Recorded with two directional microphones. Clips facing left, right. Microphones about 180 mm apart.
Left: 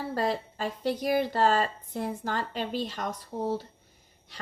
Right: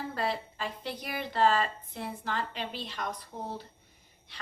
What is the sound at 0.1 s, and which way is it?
A woman's voice, 40° left (ahead or behind).